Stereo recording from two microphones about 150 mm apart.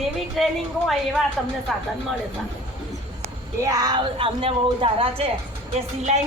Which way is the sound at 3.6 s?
25° right (ahead or behind).